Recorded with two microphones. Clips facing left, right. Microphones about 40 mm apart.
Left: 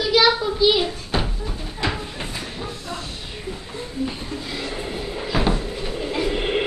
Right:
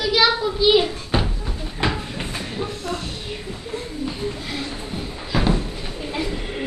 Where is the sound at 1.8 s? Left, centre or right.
Right.